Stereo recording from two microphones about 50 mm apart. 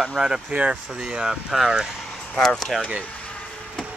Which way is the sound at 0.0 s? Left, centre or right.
Centre.